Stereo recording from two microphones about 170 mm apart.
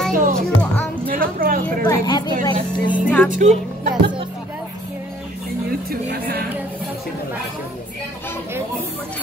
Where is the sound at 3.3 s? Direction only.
45° right (ahead or behind).